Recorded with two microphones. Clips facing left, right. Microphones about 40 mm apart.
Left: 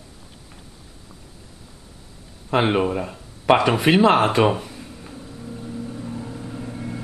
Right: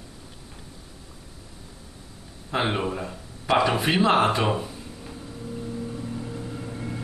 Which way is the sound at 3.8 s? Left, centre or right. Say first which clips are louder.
Left 6 dB; left.